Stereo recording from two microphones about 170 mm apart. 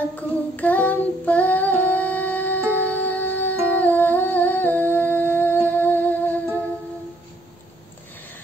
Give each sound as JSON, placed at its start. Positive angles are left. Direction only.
{"t": 0.1, "sound": "female singing", "side_deg": 10}
{"t": 2.7, "sound": "humming", "side_deg": 10}